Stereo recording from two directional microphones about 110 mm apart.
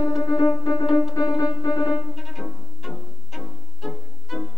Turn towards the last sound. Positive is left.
turn(degrees=0)  # may be behind; listen again after turning